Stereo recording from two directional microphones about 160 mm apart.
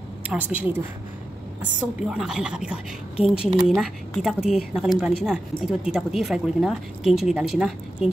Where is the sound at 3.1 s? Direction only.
35° left (ahead or behind).